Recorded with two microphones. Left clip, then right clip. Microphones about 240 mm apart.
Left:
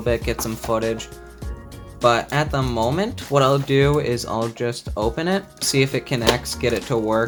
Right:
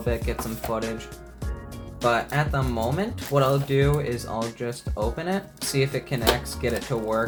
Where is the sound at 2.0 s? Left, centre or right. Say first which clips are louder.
Left 5 dB; left.